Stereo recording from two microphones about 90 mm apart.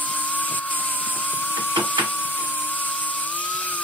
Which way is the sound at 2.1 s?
20° left (ahead or behind).